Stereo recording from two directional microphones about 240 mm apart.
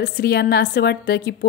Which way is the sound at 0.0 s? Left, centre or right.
Left.